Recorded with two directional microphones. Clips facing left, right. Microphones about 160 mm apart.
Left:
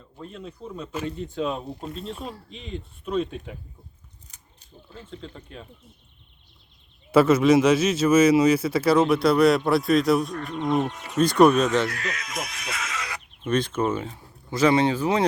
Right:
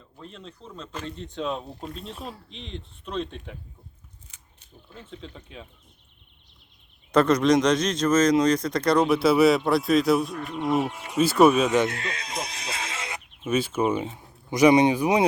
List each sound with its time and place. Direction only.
0.2 s speech: 5° left (ahead or behind)
5.1 s speech: centre (ahead or behind)
7.1 s speech: 5° left (ahead or behind)
11.8 s speech: 25° right (ahead or behind)
13.4 s speech: 5° right (ahead or behind)